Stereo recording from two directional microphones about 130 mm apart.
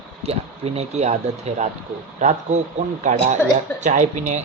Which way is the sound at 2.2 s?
70° right (ahead or behind).